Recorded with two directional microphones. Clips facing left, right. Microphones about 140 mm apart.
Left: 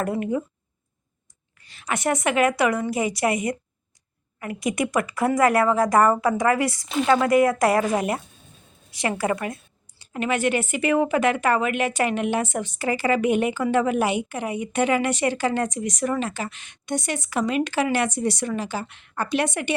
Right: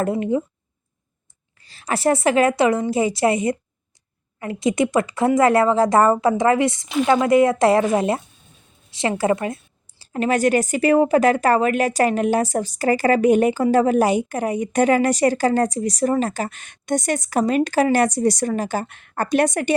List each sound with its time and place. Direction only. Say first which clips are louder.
0.0 s speech: right 4 dB; 25° right (ahead or behind)
1.6 s speech: right 5 dB; 35° right (ahead or behind)
10.0 s a woman's voice: right 5 dB; 35° right (ahead or behind)